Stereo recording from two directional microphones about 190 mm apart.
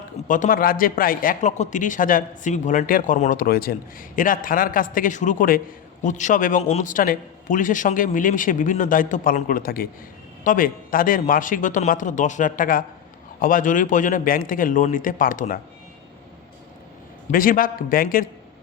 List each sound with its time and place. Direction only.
0.3 s a man's voice: 45° left (ahead or behind)
17.3 s a man's voice: 45° left (ahead or behind)